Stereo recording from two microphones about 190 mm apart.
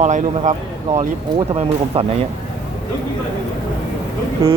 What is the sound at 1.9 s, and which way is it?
Speech, 30° right (ahead or behind).